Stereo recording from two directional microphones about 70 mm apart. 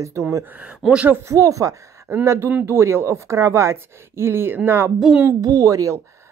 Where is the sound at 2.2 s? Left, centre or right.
Right.